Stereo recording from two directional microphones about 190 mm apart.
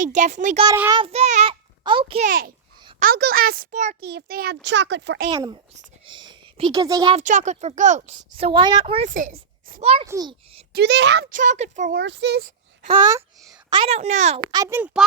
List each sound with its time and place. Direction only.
0.0 s a child's voice: 40° right (ahead or behind)
2.2 s a child's voice: 50° right (ahead or behind)
4.0 s a child's voice: 55° right (ahead or behind)
5.3 s a child's voice: 25° right (ahead or behind)
7.2 s a child's voice: 40° right (ahead or behind)
9.0 s a child's voice: 45° right (ahead or behind)
9.8 s a child's voice: 30° right (ahead or behind)
10.1 s a child's voice: 20° right (ahead or behind)
10.7 s a child's voice: 60° right (ahead or behind)
11.3 s a child's voice: 40° right (ahead or behind)
11.9 s a child's voice: 70° right (ahead or behind)
12.8 s a child's voice: 25° right (ahead or behind)
14.5 s a child's voice: 15° right (ahead or behind)